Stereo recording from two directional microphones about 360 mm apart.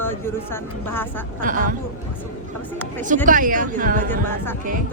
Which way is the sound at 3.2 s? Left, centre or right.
Right.